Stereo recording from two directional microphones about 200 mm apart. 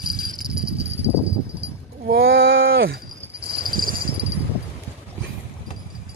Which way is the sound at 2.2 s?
70° right (ahead or behind).